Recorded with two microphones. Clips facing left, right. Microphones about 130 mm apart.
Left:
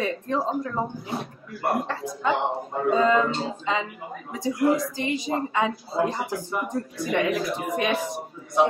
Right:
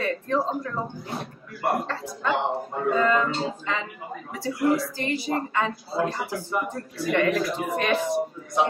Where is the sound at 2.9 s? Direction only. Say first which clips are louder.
Left 2 dB; 20° left (ahead or behind).